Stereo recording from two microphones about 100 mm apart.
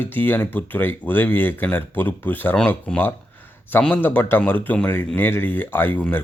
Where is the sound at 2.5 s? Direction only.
10° left (ahead or behind).